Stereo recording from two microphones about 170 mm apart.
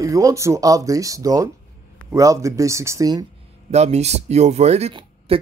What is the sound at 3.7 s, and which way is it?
Speech, 40° right (ahead or behind).